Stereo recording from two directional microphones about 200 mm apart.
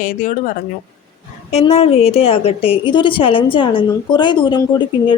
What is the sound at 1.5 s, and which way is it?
A woman's voice, 30° left (ahead or behind).